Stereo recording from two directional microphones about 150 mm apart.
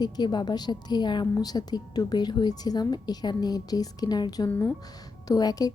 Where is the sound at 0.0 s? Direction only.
30° left (ahead or behind).